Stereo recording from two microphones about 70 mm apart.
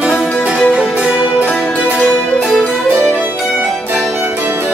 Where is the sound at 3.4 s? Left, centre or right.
Centre.